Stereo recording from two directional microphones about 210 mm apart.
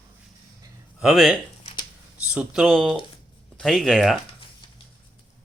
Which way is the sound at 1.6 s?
20° left (ahead or behind).